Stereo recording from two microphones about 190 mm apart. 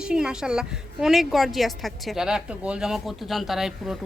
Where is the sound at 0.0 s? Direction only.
5° right (ahead or behind).